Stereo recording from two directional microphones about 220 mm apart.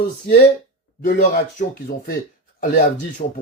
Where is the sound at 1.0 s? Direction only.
40° left (ahead or behind).